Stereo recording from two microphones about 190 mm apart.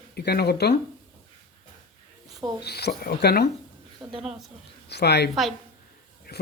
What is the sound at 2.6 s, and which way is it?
Speech, 60° left (ahead or behind).